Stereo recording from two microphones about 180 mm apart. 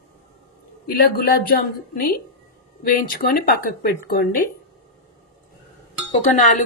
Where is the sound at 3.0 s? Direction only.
55° left (ahead or behind).